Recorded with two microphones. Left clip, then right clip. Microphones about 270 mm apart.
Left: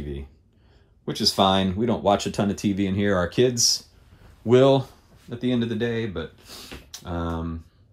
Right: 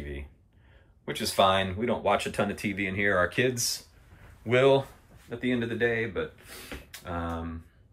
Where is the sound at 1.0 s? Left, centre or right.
Centre.